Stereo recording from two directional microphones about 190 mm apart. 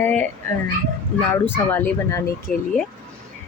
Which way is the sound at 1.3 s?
10° left (ahead or behind).